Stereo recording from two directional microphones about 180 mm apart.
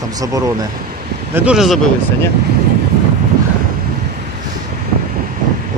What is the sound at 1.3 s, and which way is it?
Speech, 5° right (ahead or behind).